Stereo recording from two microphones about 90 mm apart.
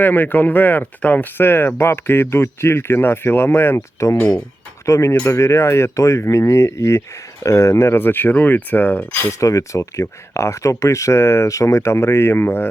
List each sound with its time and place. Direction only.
0.0 s speech: 20° left (ahead or behind)
9.4 s speech: 35° left (ahead or behind)